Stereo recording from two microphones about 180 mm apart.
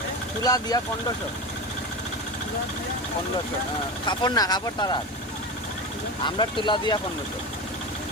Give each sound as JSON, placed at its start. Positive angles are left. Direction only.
{"t": 0.4, "sound": "speech", "side_deg": 20}
{"t": 4.0, "sound": "speech", "side_deg": 25}
{"t": 6.2, "sound": "speech", "side_deg": 25}